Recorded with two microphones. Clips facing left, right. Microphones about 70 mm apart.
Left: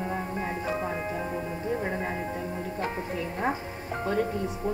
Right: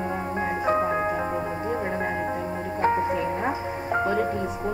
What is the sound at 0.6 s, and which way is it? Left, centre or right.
Music, right.